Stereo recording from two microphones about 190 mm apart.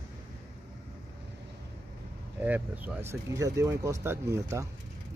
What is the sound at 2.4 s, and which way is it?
Speech, 10° right (ahead or behind).